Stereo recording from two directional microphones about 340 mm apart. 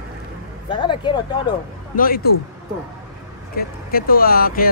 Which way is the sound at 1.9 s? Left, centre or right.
Left.